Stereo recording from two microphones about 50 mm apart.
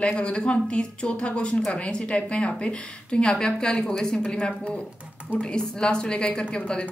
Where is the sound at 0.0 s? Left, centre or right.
Left.